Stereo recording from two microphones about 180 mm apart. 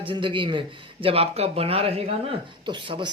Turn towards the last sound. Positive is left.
turn(degrees=-25)  # may be behind; listen again after turning